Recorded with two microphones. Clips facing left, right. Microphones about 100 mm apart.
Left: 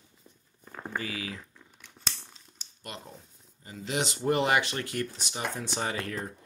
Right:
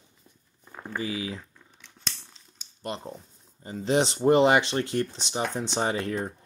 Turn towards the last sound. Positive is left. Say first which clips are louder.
# right 5 dB
turn(degrees=-25)  # may be behind; listen again after turning